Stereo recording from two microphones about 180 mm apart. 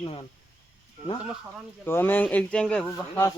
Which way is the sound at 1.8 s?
10° left (ahead or behind).